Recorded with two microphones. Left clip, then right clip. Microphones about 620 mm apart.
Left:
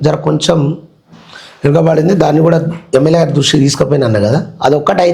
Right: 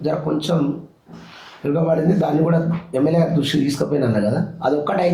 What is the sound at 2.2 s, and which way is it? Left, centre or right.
Speech, left.